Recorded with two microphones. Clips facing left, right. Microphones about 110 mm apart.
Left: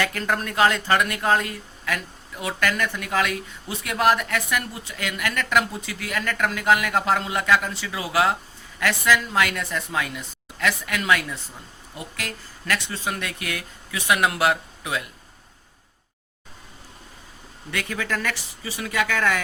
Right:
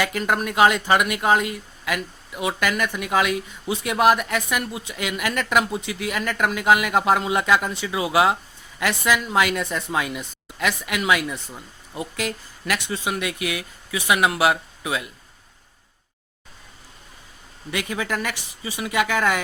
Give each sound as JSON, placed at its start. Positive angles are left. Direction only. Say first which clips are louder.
{"t": 0.0, "sound": "speech", "louder": "right 2 dB", "side_deg": -15}
{"t": 17.7, "sound": "speech", "louder": "right 2 dB", "side_deg": -15}